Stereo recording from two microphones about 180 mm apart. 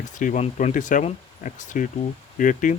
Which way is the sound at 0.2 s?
40° left (ahead or behind).